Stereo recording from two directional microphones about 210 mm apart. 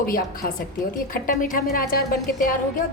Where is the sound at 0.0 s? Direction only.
45° left (ahead or behind).